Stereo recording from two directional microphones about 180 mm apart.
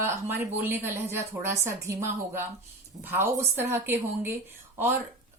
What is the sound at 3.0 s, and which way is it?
A woman's voice, 10° right (ahead or behind).